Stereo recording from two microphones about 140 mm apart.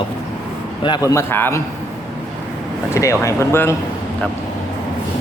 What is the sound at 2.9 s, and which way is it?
Speech, 20° left (ahead or behind).